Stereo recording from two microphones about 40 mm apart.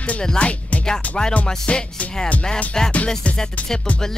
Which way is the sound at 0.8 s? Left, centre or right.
Centre.